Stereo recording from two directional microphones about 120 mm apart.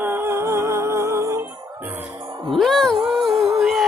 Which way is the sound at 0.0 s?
20° right (ahead or behind).